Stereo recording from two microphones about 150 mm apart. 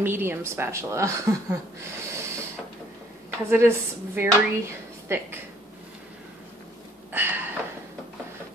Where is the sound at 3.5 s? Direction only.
15° right (ahead or behind).